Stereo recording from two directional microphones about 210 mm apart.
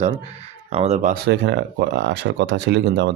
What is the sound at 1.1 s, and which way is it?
Speech, 55° right (ahead or behind).